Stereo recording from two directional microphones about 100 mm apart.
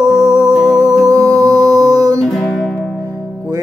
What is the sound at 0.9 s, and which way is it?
Music, 40° right (ahead or behind).